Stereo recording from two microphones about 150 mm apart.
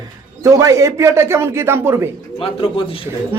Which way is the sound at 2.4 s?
35° left (ahead or behind).